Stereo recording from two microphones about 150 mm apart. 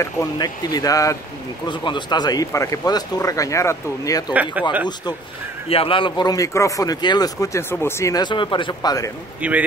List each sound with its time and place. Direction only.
0.0 s speech: 20° left (ahead or behind)
4.3 s speech: 10° right (ahead or behind)
5.7 s speech: 40° left (ahead or behind)
9.4 s speech: 10° right (ahead or behind)